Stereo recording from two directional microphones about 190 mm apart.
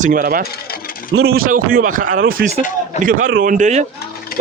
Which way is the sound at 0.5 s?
55° left (ahead or behind).